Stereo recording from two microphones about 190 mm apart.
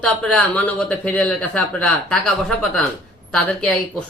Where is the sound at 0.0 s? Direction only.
5° left (ahead or behind).